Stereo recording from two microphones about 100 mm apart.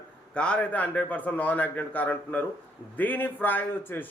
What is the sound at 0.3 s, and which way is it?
A man's voice, 10° left (ahead or behind).